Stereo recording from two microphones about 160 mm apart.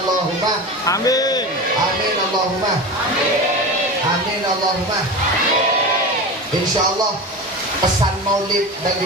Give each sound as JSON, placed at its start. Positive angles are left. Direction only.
{"t": 0.9, "sound": "a man's voice", "side_deg": 20}